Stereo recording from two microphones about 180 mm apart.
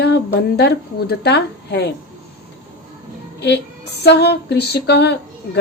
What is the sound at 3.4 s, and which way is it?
Speech, 65° left (ahead or behind).